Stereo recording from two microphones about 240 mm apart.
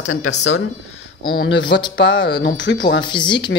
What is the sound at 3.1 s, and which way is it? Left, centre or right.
Speech, centre.